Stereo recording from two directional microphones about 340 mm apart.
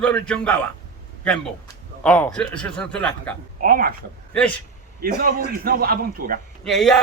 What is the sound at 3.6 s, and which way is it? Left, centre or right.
Speech, right.